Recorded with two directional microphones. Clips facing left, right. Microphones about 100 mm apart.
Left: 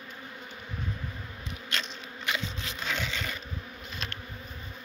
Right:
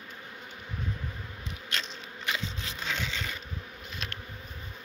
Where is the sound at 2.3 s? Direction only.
25° right (ahead or behind).